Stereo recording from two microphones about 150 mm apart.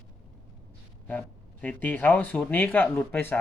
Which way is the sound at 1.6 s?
10° left (ahead or behind).